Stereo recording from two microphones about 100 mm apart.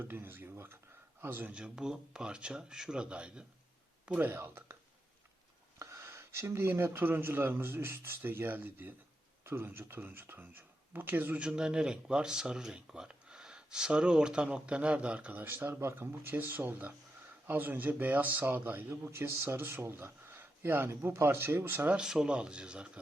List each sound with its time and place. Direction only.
0.0 s a man's voice: 20° right (ahead or behind)
4.3 s a man's voice: 25° right (ahead or behind)
5.8 s a man's voice: 30° right (ahead or behind)
11.4 s a man's voice: 5° right (ahead or behind); by 21.9 s 20° right (ahead or behind)
21.9 s speech: 5° right (ahead or behind)